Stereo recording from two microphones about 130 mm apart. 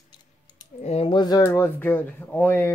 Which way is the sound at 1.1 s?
35° left (ahead or behind).